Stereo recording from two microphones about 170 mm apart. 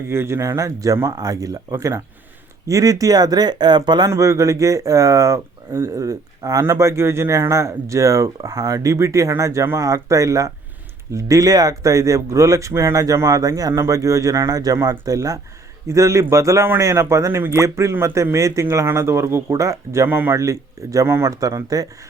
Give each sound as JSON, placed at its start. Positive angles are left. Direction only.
{"t": 0.1, "sound": "speech", "side_deg": -15}